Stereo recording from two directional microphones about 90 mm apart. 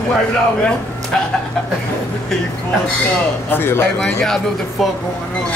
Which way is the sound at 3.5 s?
25° left (ahead or behind).